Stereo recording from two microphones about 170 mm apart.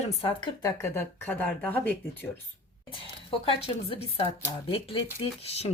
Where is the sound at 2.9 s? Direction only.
35° left (ahead or behind).